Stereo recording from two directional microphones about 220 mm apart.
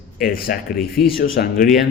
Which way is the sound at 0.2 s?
40° left (ahead or behind).